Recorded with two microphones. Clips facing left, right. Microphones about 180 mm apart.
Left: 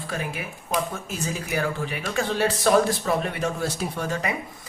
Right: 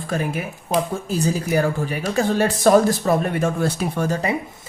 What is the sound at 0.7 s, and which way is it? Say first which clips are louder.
Speech: right 5 dB; 30° right (ahead or behind).